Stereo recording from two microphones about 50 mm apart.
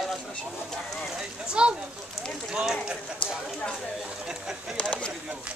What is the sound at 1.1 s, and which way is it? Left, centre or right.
Speech, centre.